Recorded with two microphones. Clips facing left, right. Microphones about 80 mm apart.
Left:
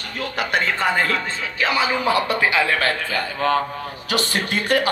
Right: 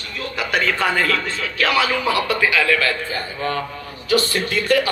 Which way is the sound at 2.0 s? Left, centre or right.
Left.